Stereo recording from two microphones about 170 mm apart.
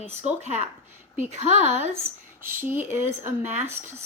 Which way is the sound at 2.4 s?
15° right (ahead or behind).